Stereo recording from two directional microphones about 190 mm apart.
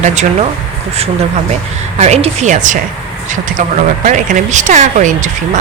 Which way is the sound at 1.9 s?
35° right (ahead or behind).